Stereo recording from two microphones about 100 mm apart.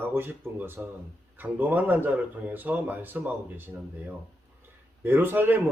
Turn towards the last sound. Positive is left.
turn(degrees=-20)  # may be behind; listen again after turning